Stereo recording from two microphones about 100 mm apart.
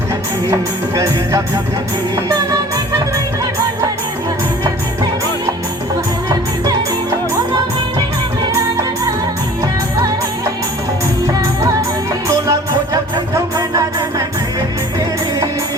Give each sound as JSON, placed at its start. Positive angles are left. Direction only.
{"t": 0.4, "sound": "music", "side_deg": -30}
{"t": 8.5, "sound": "music", "side_deg": -35}
{"t": 12.3, "sound": "music", "side_deg": -30}